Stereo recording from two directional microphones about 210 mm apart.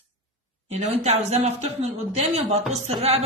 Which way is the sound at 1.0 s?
30° right (ahead or behind).